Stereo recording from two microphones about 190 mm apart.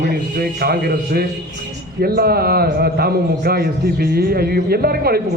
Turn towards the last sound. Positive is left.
turn(degrees=-55)  # may be behind; listen again after turning